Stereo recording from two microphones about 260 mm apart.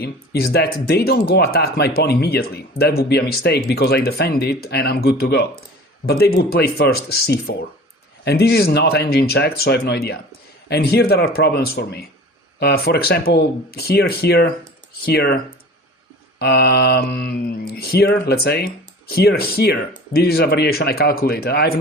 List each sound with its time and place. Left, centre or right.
0.0 s speech: left
16.4 s speech: left